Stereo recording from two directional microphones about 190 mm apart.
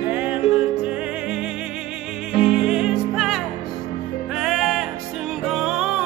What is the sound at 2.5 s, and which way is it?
Music, 5° right (ahead or behind).